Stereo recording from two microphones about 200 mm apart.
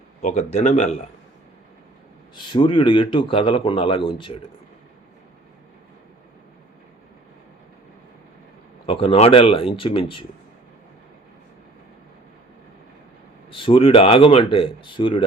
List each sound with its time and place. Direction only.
0.2 s speech: 35° left (ahead or behind)
2.3 s a man's voice: 25° left (ahead or behind)
8.9 s a man's voice: 30° left (ahead or behind)
13.5 s a man's voice: 25° left (ahead or behind)